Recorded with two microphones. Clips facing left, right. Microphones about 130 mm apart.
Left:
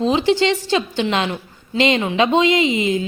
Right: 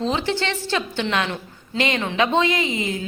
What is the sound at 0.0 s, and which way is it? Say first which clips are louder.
A woman's voice: left 7 dB; 15° left (ahead or behind).